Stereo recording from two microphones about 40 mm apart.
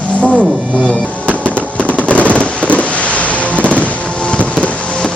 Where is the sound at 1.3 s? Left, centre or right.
Left.